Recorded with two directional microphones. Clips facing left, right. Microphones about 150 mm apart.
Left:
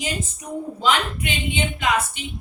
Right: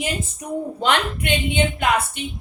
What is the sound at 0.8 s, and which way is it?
A woman's voice, 65° right (ahead or behind).